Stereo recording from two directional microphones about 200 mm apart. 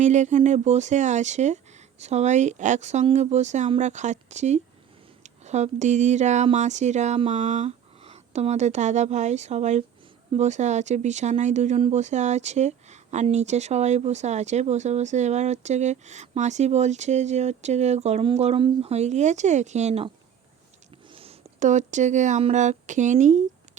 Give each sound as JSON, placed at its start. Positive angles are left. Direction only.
{"t": 0.0, "sound": "speech", "side_deg": -35}
{"t": 21.2, "sound": "speech", "side_deg": -35}